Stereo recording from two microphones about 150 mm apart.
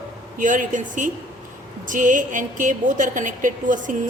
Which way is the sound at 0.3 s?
60° right (ahead or behind).